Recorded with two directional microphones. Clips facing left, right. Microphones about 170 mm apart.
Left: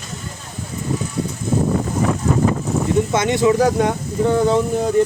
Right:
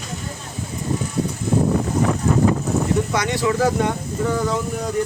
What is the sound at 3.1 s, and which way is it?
Speech, 20° left (ahead or behind).